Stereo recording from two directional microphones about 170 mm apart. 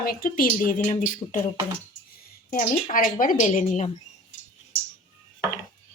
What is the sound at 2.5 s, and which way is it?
A woman's voice, 55° left (ahead or behind).